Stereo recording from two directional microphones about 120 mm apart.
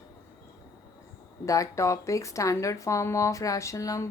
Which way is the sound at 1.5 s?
25° left (ahead or behind).